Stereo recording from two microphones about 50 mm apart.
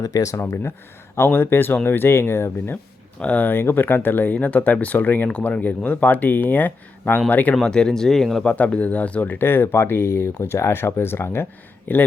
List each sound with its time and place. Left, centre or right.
0.0 s speech: left
1.3 s speech: left
3.2 s speech: left
3.4 s speech: left
4.4 s speech: left
7.6 s speech: centre
8.4 s speech: left
9.4 s speech: left